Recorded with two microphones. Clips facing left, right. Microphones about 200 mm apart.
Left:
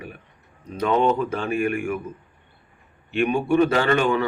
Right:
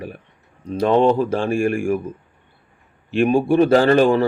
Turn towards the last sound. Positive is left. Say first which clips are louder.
# right 6 dB
turn(degrees=-35)  # may be behind; listen again after turning